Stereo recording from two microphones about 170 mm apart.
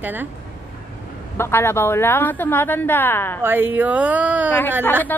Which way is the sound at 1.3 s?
15° left (ahead or behind).